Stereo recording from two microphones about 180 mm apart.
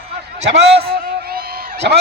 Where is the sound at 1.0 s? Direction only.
55° right (ahead or behind).